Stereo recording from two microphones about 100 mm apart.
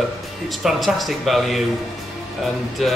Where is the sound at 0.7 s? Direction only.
Centre (ahead or behind).